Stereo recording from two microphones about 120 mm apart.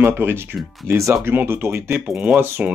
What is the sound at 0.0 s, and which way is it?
Speech, 20° right (ahead or behind).